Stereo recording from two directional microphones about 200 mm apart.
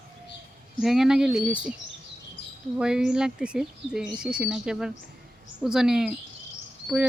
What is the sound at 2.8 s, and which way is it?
Speech, 5° right (ahead or behind).